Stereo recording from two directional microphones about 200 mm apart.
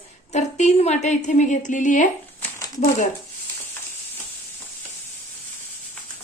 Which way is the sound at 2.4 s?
15° left (ahead or behind).